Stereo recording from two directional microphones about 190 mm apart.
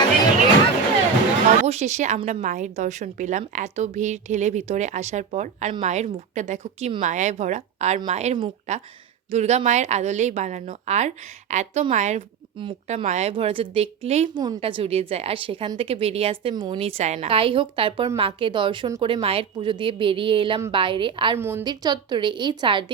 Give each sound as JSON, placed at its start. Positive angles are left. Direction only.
{"t": 1.6, "sound": "speech", "side_deg": -35}
{"t": 12.5, "sound": "a woman's voice", "side_deg": -30}
{"t": 21.3, "sound": "a woman's voice", "side_deg": -15}